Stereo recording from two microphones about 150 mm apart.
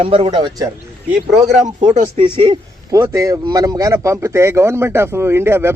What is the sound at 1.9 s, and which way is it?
Speech, 40° right (ahead or behind).